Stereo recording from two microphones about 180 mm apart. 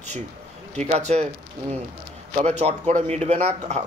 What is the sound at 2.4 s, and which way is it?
A man's voice, 40° right (ahead or behind).